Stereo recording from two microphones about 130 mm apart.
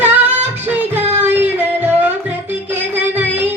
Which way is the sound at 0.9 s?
15° right (ahead or behind).